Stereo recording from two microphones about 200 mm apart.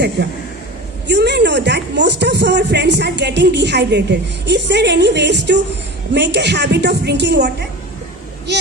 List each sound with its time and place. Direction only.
0.2 s a woman's voice: 60° right (ahead or behind)